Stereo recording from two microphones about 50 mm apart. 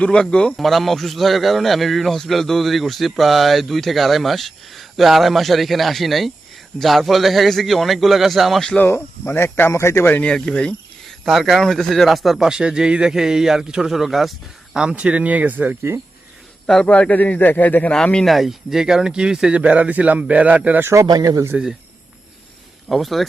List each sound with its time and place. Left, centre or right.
0.0 s speech: centre
0.5 s speech: centre
8.8 s speech: left
9.7 s speech: left
10.2 s speech: centre
11.3 s speech: centre
14.8 s speech: centre; by 15.8 s right
16.6 s speech: centre
16.9 s a man's voice: left
17.9 s speech: centre
18.3 s speech: centre; by 20.7 s right
20.8 s speech: right
22.9 s speech: centre